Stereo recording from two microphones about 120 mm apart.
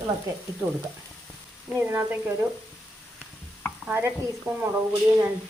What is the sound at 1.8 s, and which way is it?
Speech, 15° right (ahead or behind).